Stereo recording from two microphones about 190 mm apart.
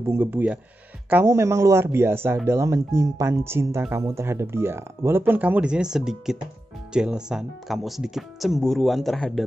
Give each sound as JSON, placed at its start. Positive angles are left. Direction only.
{"t": 0.1, "sound": "speech", "side_deg": -10}